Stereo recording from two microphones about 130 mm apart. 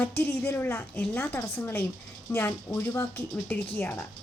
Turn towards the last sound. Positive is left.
turn(degrees=15)  # may be behind; listen again after turning